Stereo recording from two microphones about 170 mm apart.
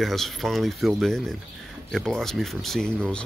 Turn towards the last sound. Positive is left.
turn(degrees=5)  # may be behind; listen again after turning